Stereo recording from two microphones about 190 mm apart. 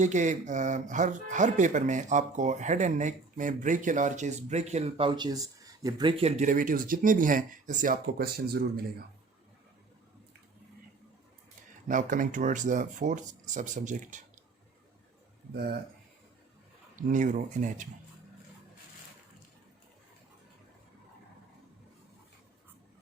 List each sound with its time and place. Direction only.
0.0 s speech: 40° right (ahead or behind)
11.9 s speech: 45° right (ahead or behind)
15.5 s speech: 55° right (ahead or behind)
16.9 s speech: 40° right (ahead or behind)